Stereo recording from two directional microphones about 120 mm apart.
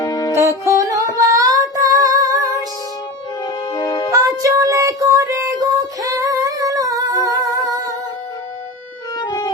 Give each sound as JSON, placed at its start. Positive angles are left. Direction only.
{"t": 0.0, "sound": "music", "side_deg": 30}
{"t": 0.3, "sound": "music", "side_deg": -20}
{"t": 3.4, "sound": "organ", "side_deg": 30}
{"t": 4.1, "sound": "child singing", "side_deg": -25}
{"t": 9.1, "sound": "a sound", "side_deg": 35}